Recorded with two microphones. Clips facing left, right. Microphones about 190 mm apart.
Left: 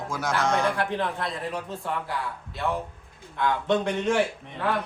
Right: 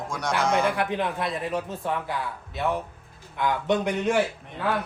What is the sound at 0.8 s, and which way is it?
Speech, 15° right (ahead or behind).